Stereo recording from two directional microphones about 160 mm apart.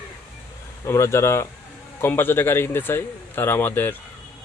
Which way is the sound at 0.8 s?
20° left (ahead or behind).